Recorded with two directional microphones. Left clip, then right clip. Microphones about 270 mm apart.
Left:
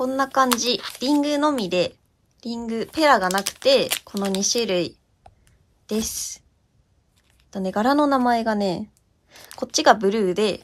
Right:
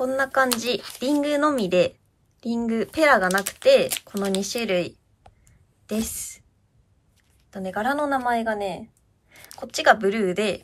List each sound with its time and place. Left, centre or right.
0.0 s speech: centre
7.5 s a woman's voice: centre